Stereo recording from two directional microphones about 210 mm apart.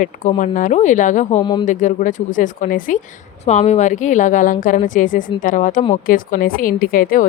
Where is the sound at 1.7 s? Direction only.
35° left (ahead or behind).